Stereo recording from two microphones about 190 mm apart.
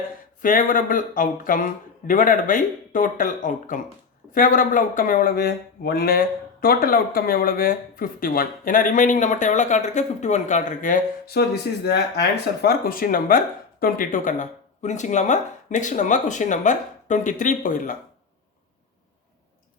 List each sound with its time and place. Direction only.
0.4 s speech: 45° left (ahead or behind)
12.6 s speech: 50° left (ahead or behind)